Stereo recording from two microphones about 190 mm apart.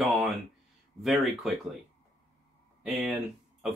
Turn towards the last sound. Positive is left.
turn(degrees=0)  # may be behind; listen again after turning